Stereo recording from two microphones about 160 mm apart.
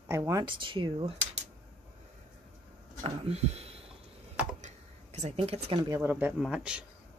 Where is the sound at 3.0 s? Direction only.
40° right (ahead or behind).